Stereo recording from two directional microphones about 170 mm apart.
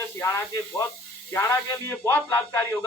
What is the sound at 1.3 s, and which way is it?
Speech, 15° left (ahead or behind).